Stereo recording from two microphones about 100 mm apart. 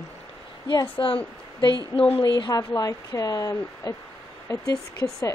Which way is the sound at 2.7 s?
35° left (ahead or behind).